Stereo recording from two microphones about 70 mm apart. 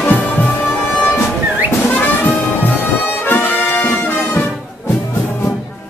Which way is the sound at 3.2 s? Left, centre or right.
Left.